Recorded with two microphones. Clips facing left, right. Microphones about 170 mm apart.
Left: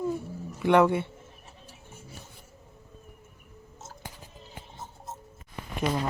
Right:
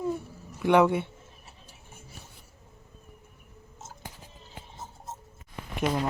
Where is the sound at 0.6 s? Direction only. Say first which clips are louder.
Even; centre (ahead or behind).